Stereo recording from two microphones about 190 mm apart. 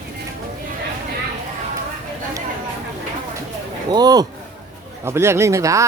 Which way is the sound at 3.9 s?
20° right (ahead or behind).